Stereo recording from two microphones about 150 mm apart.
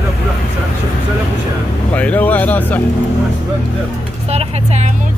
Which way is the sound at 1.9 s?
10° left (ahead or behind).